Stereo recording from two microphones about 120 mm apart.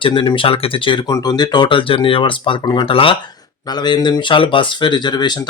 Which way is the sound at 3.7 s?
35° left (ahead or behind).